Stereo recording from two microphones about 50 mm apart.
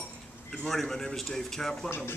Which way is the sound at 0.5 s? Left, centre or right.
Centre.